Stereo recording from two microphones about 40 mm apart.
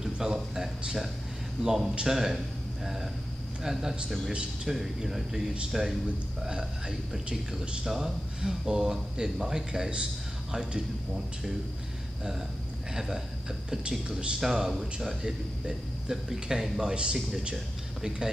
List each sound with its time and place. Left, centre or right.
0.0 s speech: centre
6.4 s speech: centre
12.9 s speech: centre
14.4 s speech: centre
16.9 s speech: right